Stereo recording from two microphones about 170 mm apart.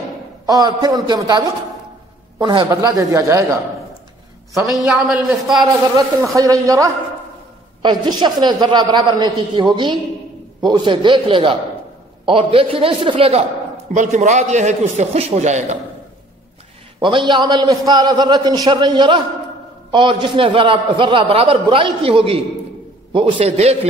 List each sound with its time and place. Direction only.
0.5 s a man's voice: 20° right (ahead or behind)
4.7 s a woman's voice: centre (ahead or behind)
5.6 s a man's voice: 20° right (ahead or behind)
13.9 s a man's voice: 45° right (ahead or behind)
17.0 s a man's voice: 30° right (ahead or behind)